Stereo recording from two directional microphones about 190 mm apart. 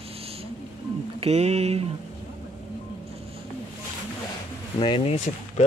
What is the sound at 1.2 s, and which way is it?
Mantra, 35° right (ahead or behind).